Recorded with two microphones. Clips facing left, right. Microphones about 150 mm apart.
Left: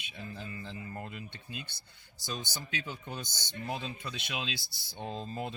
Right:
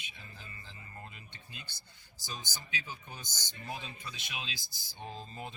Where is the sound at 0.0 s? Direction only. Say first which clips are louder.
Left 9 dB; 60° left (ahead or behind).